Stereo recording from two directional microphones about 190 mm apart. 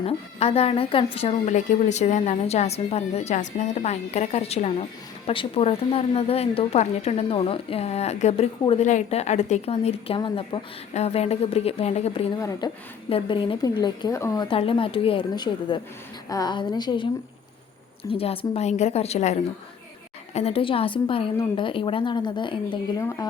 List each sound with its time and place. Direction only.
0.0 s speech: 30° left (ahead or behind)
12.4 s a woman's voice: 20° left (ahead or behind)
18.1 s a woman's voice: 30° left (ahead or behind)